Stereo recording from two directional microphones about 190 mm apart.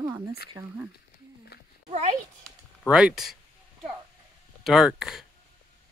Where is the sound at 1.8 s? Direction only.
35° right (ahead or behind).